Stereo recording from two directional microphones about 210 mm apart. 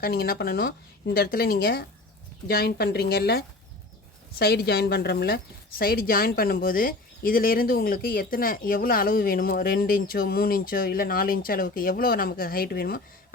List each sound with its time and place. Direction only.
0.0 s speech: 45° left (ahead or behind)